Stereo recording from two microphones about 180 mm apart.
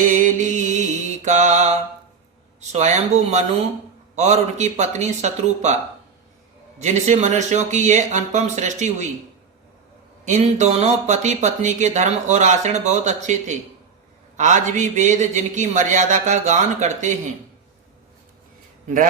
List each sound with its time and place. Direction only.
0.1 s music: 45° right (ahead or behind)
1.2 s mantra: 40° right (ahead or behind)
2.6 s speech: 40° right (ahead or behind)
6.7 s speech: 40° right (ahead or behind)
10.2 s a man's voice: 40° right (ahead or behind)